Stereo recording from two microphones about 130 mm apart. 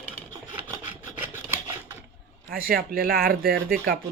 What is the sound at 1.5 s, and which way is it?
Typewriter, 20° right (ahead or behind).